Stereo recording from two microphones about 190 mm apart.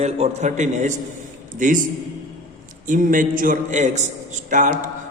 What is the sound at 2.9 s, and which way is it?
A man's voice, 45° right (ahead or behind).